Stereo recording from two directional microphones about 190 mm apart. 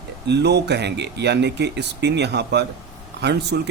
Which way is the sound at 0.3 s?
60° right (ahead or behind).